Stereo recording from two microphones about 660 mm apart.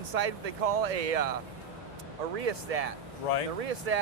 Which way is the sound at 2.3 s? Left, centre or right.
Right.